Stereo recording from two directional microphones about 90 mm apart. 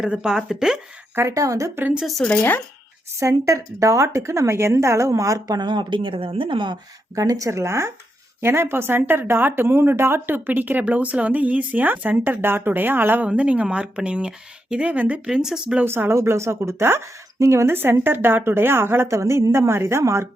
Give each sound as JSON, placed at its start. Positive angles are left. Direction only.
{"t": 0.0, "sound": "speech", "side_deg": -10}
{"t": 1.1, "sound": "a woman's voice", "side_deg": -35}
{"t": 1.8, "sound": "speech", "side_deg": -10}
{"t": 2.2, "sound": "speech", "side_deg": 20}
{"t": 3.2, "sound": "a woman's voice", "side_deg": -35}
{"t": 5.5, "sound": "speech", "side_deg": -55}
{"t": 7.2, "sound": "a woman's voice", "side_deg": -40}
{"t": 15.8, "sound": "speech", "side_deg": -25}